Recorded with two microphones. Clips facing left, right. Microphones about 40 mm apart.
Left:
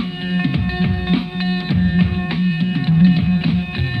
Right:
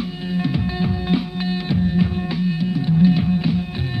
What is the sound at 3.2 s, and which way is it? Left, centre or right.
Music, left.